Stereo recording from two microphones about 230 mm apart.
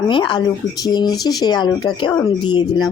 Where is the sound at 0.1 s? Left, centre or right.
Left.